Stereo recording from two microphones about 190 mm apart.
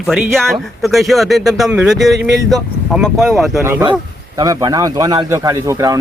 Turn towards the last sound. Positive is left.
turn(degrees=-15)  # may be behind; listen again after turning